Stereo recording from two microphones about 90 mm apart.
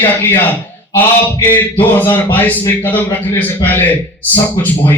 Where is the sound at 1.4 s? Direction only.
20° left (ahead or behind).